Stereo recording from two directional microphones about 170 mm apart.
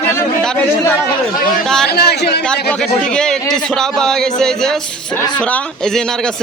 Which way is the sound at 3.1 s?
5° left (ahead or behind).